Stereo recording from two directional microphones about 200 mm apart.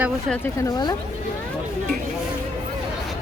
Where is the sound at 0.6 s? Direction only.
20° left (ahead or behind).